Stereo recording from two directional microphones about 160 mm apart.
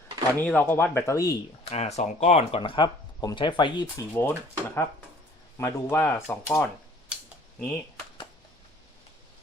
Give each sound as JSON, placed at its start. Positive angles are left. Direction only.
{"t": 0.3, "sound": "speech", "side_deg": 15}
{"t": 1.7, "sound": "speech", "side_deg": 45}
{"t": 4.1, "sound": "speech", "side_deg": 15}